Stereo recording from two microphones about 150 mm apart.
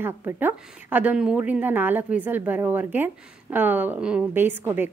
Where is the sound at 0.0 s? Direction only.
15° right (ahead or behind).